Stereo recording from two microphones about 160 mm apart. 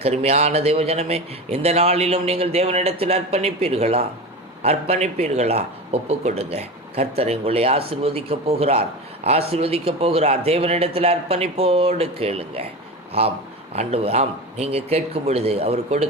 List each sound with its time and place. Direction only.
0.0 s speech: 40° right (ahead or behind)